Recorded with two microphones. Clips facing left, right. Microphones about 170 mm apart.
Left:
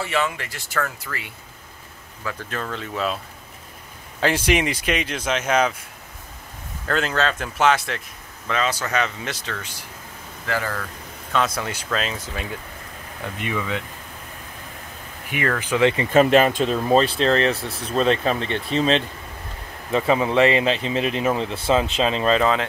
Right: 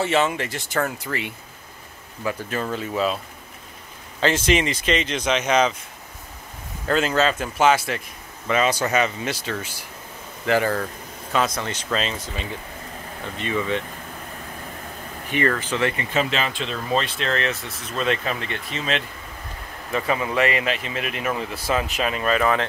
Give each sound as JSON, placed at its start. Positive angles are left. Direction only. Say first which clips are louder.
{"t": 0.0, "sound": "speech", "louder": "right 4 dB", "side_deg": -25}
{"t": 2.2, "sound": "speech", "louder": "right 3 dB", "side_deg": -10}
{"t": 4.2, "sound": "speech", "louder": "even", "side_deg": 10}
{"t": 6.9, "sound": "speech", "louder": "right 2 dB", "side_deg": -5}
{"t": 8.5, "sound": "speech", "louder": "right 3 dB", "side_deg": -10}
{"t": 9.0, "sound": "speech", "louder": "right 3 dB", "side_deg": 0}
{"t": 10.4, "sound": "speech", "louder": "right 6 dB", "side_deg": -20}
{"t": 11.3, "sound": "speech", "louder": "even", "side_deg": 5}
{"t": 15.3, "sound": "speech", "louder": "even", "side_deg": 10}
{"t": 16.1, "sound": "speech", "louder": "left 9 dB", "side_deg": 50}